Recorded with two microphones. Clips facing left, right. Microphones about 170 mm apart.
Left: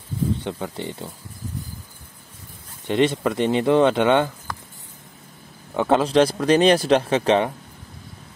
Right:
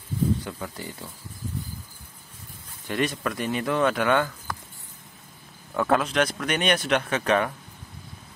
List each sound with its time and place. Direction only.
0.4 s speech: 25° left (ahead or behind)
2.9 s speech: 25° left (ahead or behind)
5.8 s speech: 25° left (ahead or behind)